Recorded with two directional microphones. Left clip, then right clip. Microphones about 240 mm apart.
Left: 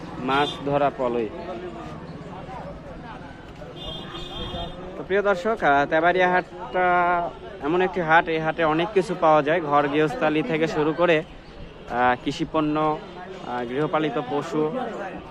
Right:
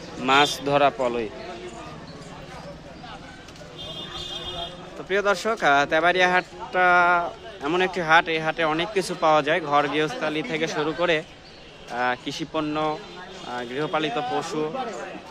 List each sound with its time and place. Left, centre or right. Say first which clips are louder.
0.3 s a man's voice: right 4 dB; right
5.0 s speech: left 1 dB; centre
10.2 s speech: left 4 dB; centre